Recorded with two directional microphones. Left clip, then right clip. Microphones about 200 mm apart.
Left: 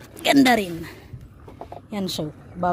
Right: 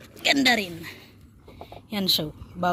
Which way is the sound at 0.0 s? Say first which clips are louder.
Left 3 dB; 35° left (ahead or behind).